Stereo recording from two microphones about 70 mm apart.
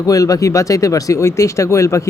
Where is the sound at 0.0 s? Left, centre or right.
Left.